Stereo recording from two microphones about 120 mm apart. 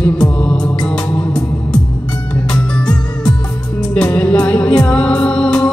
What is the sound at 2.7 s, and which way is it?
Music, 5° left (ahead or behind).